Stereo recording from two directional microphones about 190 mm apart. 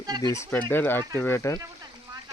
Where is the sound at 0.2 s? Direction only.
15° left (ahead or behind).